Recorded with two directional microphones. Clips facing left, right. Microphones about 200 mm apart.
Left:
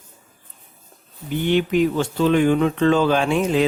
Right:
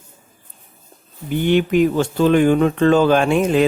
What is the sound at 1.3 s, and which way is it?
Speech, 50° right (ahead or behind).